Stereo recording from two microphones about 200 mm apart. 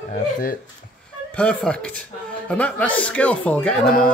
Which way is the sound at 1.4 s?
5° left (ahead or behind).